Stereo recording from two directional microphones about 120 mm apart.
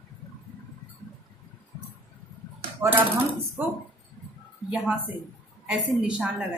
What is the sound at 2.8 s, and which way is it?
Speech, 15° right (ahead or behind).